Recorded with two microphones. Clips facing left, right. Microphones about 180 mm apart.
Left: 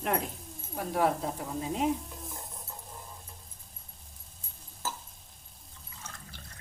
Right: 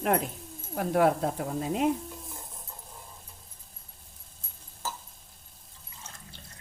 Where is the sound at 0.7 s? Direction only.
60° right (ahead or behind).